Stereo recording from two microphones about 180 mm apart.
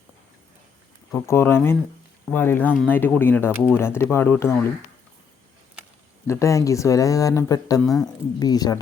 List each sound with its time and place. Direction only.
1.1 s speech: 15° left (ahead or behind)
6.2 s speech: 15° left (ahead or behind)
7.8 s speech: 5° left (ahead or behind)
8.4 s speech: 20° left (ahead or behind)